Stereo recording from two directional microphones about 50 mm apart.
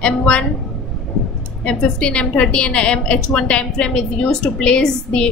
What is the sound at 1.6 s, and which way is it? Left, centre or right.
A woman's voice, left.